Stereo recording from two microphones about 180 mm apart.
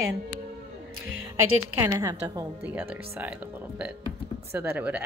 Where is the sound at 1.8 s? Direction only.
15° right (ahead or behind).